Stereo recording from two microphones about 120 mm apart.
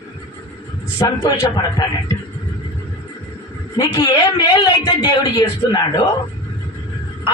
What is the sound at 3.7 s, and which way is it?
A man's voice, 35° left (ahead or behind).